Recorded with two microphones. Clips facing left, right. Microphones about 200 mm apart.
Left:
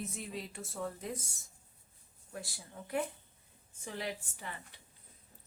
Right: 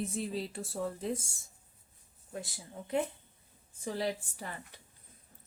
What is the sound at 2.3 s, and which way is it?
Speech, 20° right (ahead or behind).